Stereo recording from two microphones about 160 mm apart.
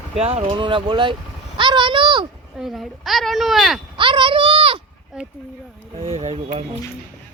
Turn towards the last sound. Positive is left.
turn(degrees=-40)  # may be behind; listen again after turning